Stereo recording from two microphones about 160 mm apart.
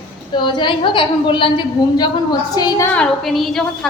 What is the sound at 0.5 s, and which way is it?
A woman's voice, 30° left (ahead or behind).